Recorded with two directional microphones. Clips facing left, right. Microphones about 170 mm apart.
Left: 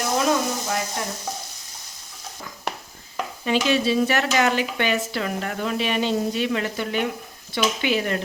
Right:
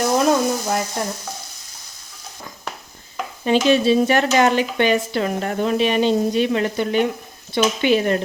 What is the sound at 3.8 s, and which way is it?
Speech, 25° right (ahead or behind).